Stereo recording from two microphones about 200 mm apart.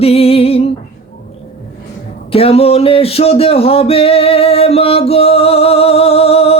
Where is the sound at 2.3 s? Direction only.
30° left (ahead or behind).